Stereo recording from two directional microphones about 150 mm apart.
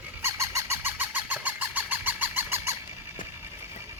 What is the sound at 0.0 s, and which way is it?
Fowl, 15° right (ahead or behind).